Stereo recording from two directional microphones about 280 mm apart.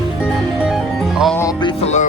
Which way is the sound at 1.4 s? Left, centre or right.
Centre.